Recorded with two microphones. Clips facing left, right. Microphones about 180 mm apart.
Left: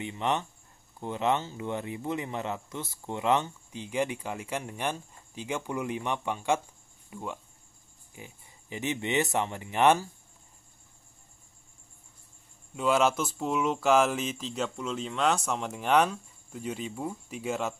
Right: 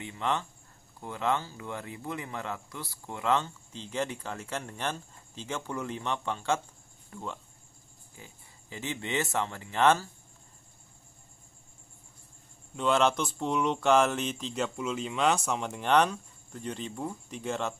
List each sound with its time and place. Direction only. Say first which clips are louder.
0.0 s speech: left 2 dB; 20° left (ahead or behind)
12.7 s speech: left 1 dB; 5° left (ahead or behind)